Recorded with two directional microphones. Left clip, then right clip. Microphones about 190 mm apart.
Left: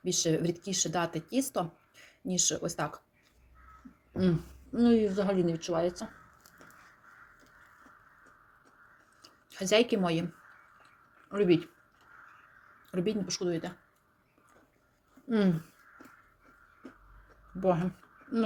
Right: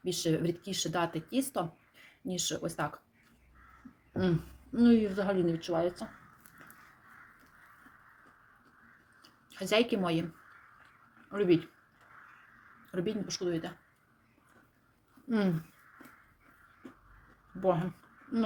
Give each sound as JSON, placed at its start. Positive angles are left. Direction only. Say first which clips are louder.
{"t": 0.0, "sound": "speech", "louder": "left 2 dB", "side_deg": 10}
{"t": 4.1, "sound": "speech", "louder": "left 1 dB", "side_deg": 10}
{"t": 9.2, "sound": "speech", "louder": "left 3 dB", "side_deg": 15}
{"t": 11.3, "sound": "speech", "louder": "left 1 dB", "side_deg": 15}
{"t": 12.9, "sound": "speech", "louder": "left 3 dB", "side_deg": 15}
{"t": 15.3, "sound": "speech", "louder": "left 3 dB", "side_deg": 10}
{"t": 17.6, "sound": "speech", "louder": "left 1 dB", "side_deg": 10}